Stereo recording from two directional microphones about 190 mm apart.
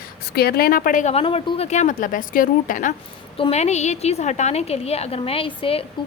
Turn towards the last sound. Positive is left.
turn(degrees=30)  # may be behind; listen again after turning